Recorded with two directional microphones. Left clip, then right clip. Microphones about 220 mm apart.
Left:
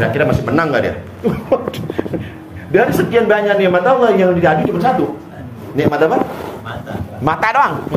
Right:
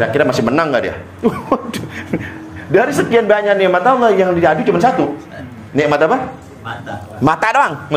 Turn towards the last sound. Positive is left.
turn(degrees=-50)  # may be behind; listen again after turning